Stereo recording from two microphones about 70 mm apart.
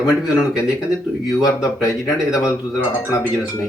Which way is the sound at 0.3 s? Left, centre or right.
Centre.